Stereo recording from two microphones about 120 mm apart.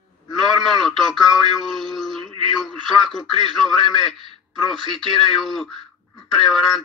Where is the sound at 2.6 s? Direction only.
Centre (ahead or behind).